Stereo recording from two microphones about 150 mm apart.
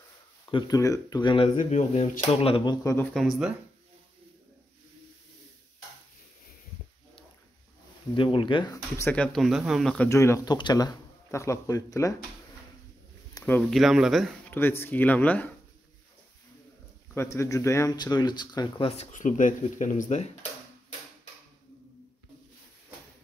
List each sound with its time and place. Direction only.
0.5 s speech: 30° left (ahead or behind)
1.6 s speech: 55° left (ahead or behind)
2.4 s speech: 35° left (ahead or behind)
3.1 s speech: centre (ahead or behind)
8.2 s speech: 35° left (ahead or behind)
8.7 s speech: 20° left (ahead or behind)
9.1 s speech: 5° left (ahead or behind)
9.9 s speech: 20° left (ahead or behind)
13.6 s speech: centre (ahead or behind)
14.5 s speech: 15° left (ahead or behind)
17.1 s speech: 20° left (ahead or behind); by 19.0 s 40° left (ahead or behind)
19.1 s speech: 60° left (ahead or behind)